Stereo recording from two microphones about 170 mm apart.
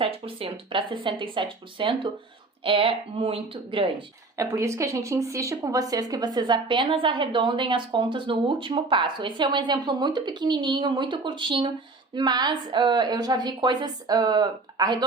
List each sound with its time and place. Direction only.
0.0 s speech: 30° right (ahead or behind)
4.4 s speech: 15° right (ahead or behind)